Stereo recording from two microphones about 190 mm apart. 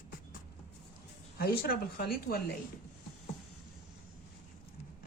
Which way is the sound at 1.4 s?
55° left (ahead or behind).